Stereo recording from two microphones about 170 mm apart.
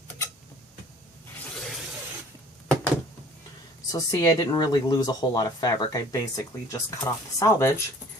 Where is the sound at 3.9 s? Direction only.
20° left (ahead or behind).